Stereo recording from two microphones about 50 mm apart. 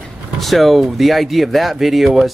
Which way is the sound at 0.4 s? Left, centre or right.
Centre.